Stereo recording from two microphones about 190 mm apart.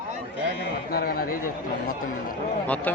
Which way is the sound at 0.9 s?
50° left (ahead or behind).